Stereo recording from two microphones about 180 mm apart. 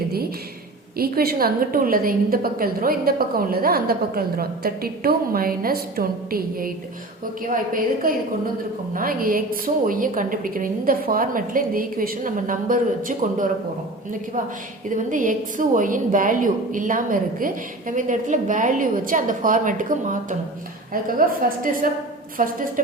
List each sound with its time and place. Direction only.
0.9 s a woman's voice: 55° right (ahead or behind)
14.8 s a woman's voice: 45° right (ahead or behind)